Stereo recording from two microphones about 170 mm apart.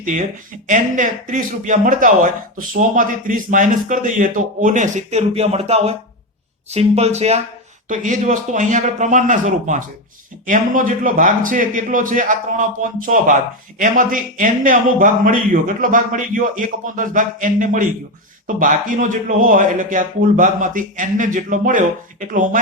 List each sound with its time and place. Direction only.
0.7 s a man's voice: 50° right (ahead or behind)